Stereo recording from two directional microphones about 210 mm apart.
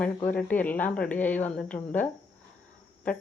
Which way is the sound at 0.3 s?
5° left (ahead or behind).